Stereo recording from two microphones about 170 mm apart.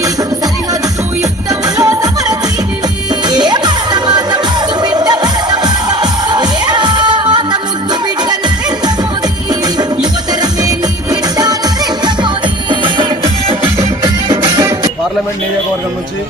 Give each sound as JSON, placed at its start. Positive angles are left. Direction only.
{"t": 1.5, "sound": "music", "side_deg": -20}
{"t": 10.4, "sound": "music", "side_deg": -20}
{"t": 12.8, "sound": "music", "side_deg": -30}